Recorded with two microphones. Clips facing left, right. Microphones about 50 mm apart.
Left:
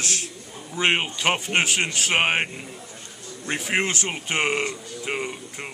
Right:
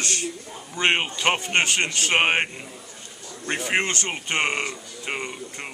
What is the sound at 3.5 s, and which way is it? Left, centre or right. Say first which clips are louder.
Speech: even; centre.